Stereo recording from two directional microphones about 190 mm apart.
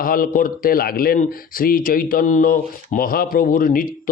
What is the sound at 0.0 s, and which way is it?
Speech, 50° left (ahead or behind).